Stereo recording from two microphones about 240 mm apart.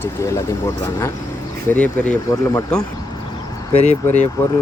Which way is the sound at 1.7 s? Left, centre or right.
Centre.